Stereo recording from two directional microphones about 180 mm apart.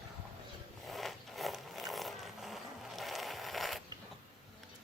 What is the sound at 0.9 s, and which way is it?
Zipper, centre (ahead or behind).